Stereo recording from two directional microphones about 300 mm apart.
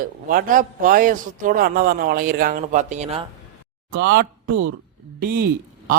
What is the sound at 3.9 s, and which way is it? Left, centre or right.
A man's voice, right.